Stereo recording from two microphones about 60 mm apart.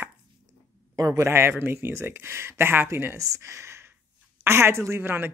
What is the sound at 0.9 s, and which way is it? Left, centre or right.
Speech, right.